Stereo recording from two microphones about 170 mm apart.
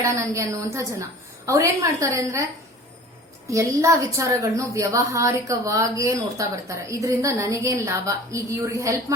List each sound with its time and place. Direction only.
0.0 s a woman's voice: 20° right (ahead or behind)
3.5 s a woman's voice: 20° right (ahead or behind)